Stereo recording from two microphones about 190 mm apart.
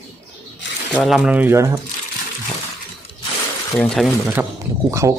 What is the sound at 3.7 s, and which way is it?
Speech, 5° left (ahead or behind).